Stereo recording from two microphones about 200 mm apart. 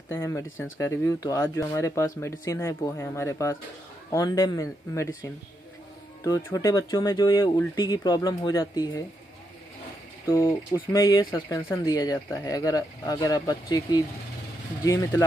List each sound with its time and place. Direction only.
0.1 s speech: 15° left (ahead or behind)
10.2 s speech: 15° left (ahead or behind)